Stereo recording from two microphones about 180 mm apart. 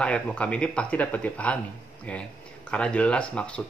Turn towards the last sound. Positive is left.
turn(degrees=5)  # may be behind; listen again after turning